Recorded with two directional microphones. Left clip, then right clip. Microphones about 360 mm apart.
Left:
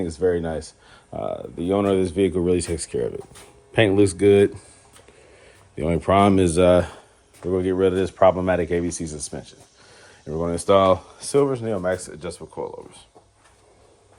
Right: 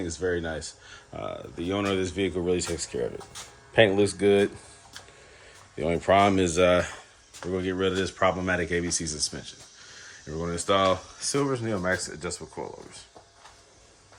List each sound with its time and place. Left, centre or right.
0.2 s speech: centre
5.8 s speech: centre